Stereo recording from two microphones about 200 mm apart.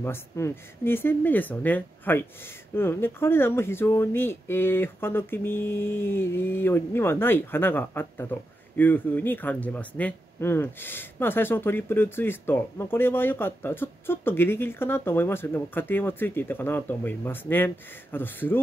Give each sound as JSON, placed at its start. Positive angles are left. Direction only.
{"t": 0.0, "sound": "speech", "side_deg": 10}